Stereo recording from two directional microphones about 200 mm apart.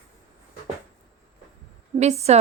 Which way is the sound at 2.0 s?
35° right (ahead or behind).